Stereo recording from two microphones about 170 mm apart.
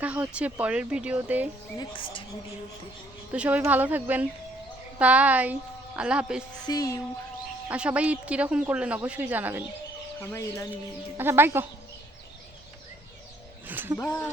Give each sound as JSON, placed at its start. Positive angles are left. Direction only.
{"t": 0.0, "sound": "a woman's voice", "side_deg": -10}
{"t": 1.8, "sound": "a woman's voice", "side_deg": 30}
{"t": 3.3, "sound": "a woman's voice", "side_deg": -10}
{"t": 6.7, "sound": "music", "side_deg": 20}
{"t": 7.7, "sound": "a woman's voice", "side_deg": -5}
{"t": 10.2, "sound": "speech", "side_deg": 15}
{"t": 11.2, "sound": "a woman's voice", "side_deg": -15}
{"t": 13.7, "sound": "a woman's voice", "side_deg": -10}
{"t": 14.0, "sound": "music", "side_deg": 20}